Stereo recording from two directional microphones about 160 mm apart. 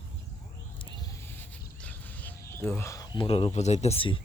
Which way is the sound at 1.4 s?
10° left (ahead or behind).